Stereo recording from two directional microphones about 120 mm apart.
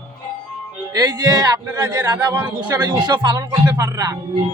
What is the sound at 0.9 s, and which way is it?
Speech, 35° right (ahead or behind).